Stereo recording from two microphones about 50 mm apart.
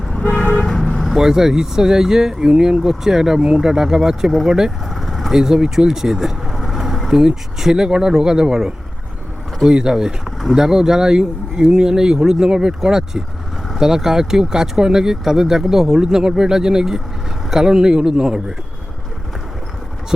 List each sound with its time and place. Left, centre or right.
0.2 s vehicle: left
0.6 s vehicle: centre
1.1 s speech: centre
4.9 s vehicle: centre
5.3 s speech: centre